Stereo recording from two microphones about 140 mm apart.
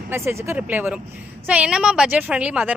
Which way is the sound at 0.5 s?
15° right (ahead or behind).